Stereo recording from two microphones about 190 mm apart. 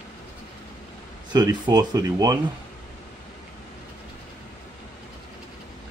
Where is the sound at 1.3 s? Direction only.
20° right (ahead or behind).